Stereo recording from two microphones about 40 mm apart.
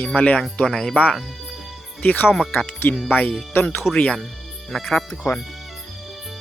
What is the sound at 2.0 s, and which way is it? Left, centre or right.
Speech, left.